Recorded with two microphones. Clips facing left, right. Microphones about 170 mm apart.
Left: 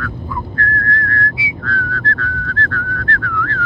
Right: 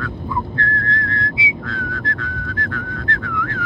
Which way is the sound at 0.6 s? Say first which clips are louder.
Left 2 dB; 25° right (ahead or behind).